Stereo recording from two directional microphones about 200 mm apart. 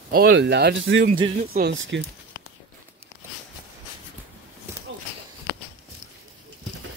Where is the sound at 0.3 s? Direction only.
55° right (ahead or behind).